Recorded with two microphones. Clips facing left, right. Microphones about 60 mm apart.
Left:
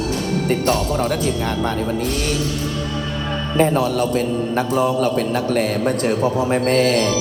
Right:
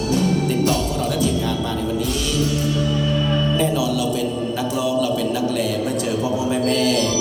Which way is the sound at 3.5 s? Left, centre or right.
Left.